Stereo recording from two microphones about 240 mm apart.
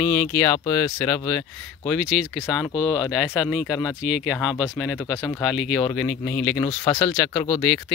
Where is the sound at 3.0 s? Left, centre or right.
Centre.